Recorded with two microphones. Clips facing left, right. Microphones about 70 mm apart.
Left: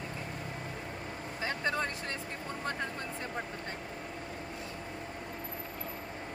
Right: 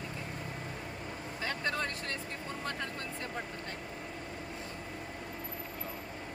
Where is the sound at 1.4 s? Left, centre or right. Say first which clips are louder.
Left 2 dB; left.